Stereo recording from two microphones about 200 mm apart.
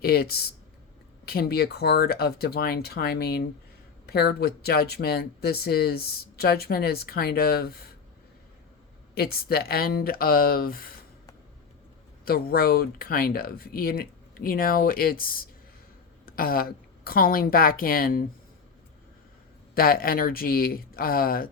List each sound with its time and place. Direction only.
0.0 s speech: 50° left (ahead or behind)
9.1 s speech: 50° left (ahead or behind)
12.2 s a woman's voice: 50° left (ahead or behind)
19.7 s speech: 45° left (ahead or behind)